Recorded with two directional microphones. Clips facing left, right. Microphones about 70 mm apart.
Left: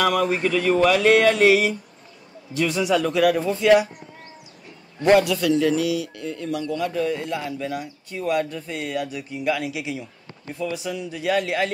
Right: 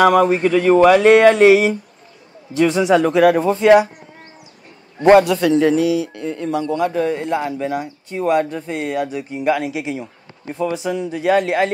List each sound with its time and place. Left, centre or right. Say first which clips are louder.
0.0 s a man's voice: right 8 dB; right
5.0 s a man's voice: right 6 dB; right